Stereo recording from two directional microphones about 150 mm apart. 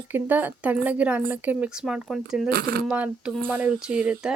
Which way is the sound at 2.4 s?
90° right.